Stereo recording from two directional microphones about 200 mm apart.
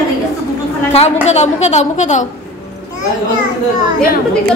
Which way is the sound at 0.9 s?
30° left (ahead or behind).